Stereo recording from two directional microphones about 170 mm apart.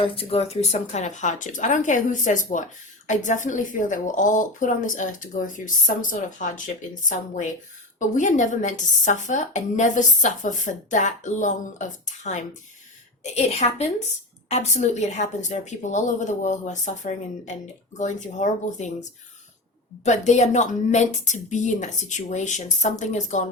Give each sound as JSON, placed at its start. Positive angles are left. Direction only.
{"t": 0.0, "sound": "a woman's voice", "side_deg": 35}
{"t": 7.9, "sound": "a woman's voice", "side_deg": 50}
{"t": 20.1, "sound": "a woman's voice", "side_deg": 45}